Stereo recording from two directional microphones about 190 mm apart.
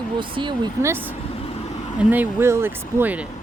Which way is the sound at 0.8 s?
10° right (ahead or behind).